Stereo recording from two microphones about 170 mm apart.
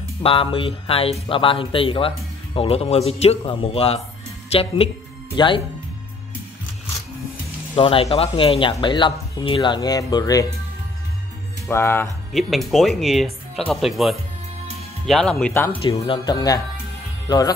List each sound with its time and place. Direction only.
0.2 s speech: 30° left (ahead or behind)
7.7 s speech: 30° left (ahead or behind)
11.6 s speech: 15° left (ahead or behind)
12.3 s speech: centre (ahead or behind)
16.1 s speech: 25° left (ahead or behind)